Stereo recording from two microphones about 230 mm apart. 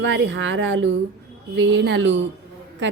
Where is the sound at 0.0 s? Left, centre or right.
Right.